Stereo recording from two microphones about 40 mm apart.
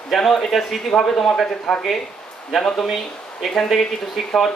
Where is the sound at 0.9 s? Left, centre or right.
Centre.